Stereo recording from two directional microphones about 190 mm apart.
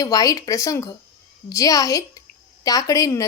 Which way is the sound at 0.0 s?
20° left (ahead or behind).